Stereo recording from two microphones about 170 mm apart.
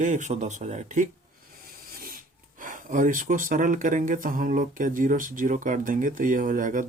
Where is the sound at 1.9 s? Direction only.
60° right (ahead or behind).